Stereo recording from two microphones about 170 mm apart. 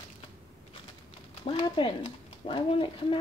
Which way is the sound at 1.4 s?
30° left (ahead or behind).